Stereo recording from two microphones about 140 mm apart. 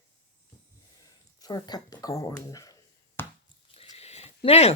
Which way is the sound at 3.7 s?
45° left (ahead or behind).